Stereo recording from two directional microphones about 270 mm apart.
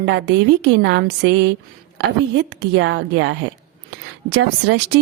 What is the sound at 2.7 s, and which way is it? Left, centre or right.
Speech, right.